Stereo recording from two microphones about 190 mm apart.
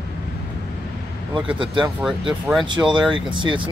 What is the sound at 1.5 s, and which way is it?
Speech, 25° right (ahead or behind).